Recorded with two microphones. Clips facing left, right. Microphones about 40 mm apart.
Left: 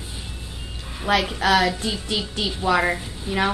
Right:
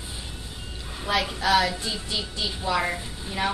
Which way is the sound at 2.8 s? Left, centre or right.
Left.